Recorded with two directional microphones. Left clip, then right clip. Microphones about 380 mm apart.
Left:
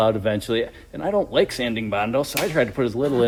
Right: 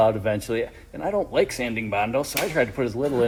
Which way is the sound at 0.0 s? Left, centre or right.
Left.